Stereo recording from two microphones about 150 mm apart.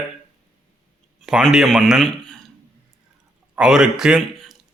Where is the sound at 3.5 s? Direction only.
5° right (ahead or behind).